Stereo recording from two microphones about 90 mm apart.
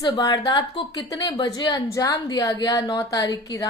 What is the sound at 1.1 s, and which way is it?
Speech, 55° left (ahead or behind).